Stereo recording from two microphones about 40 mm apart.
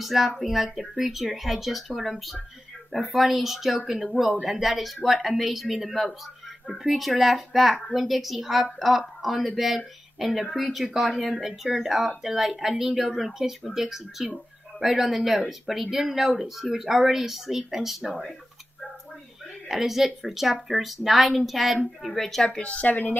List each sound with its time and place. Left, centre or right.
0.0 s speech: centre
19.7 s speech: centre
22.5 s speech: left